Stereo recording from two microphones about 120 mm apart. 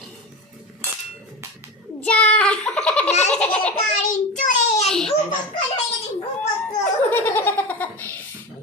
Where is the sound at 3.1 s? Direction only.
70° left (ahead or behind).